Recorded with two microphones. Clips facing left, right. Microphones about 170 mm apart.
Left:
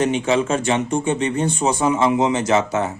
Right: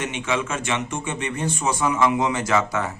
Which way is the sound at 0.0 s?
35° left (ahead or behind).